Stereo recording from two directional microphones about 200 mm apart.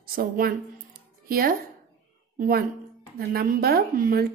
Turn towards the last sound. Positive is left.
turn(degrees=-50)  # may be behind; listen again after turning